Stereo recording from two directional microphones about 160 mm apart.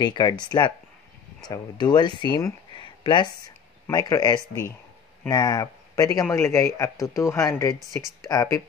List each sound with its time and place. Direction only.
0.0 s speech: 25° left (ahead or behind)